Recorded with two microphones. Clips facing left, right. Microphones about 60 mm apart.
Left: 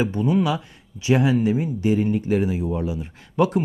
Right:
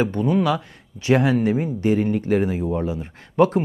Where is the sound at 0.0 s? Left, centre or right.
Right.